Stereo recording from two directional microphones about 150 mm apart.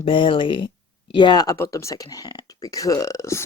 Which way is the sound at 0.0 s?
35° left (ahead or behind).